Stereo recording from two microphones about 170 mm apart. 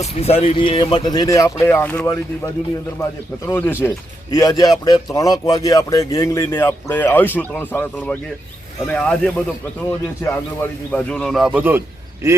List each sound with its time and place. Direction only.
0.0 s speech: 40° left (ahead or behind); by 7.9 s 10° left (ahead or behind)
8.9 s speech: 5° left (ahead or behind); by 11.8 s 10° right (ahead or behind)